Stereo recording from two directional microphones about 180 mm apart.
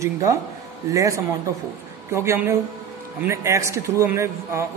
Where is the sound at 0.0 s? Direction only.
20° right (ahead or behind).